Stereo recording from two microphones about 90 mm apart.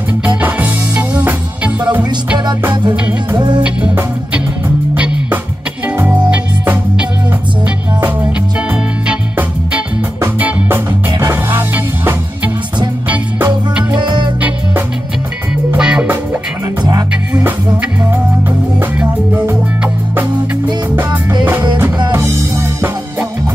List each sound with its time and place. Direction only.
0.4 s music: 15° right (ahead or behind)
3.3 s music: 60° right (ahead or behind)
3.6 s music: 15° right (ahead or behind)
10.2 s music: 25° right (ahead or behind)
15.8 s music: 10° right (ahead or behind)
17.3 s music: 20° right (ahead or behind)
18.8 s music: 20° right (ahead or behind)
22.1 s music: 30° right (ahead or behind)